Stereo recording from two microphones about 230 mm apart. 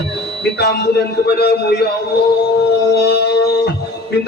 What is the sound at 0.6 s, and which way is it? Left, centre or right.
Speech, left.